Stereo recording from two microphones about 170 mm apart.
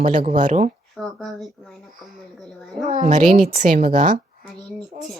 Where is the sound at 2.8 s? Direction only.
45° right (ahead or behind).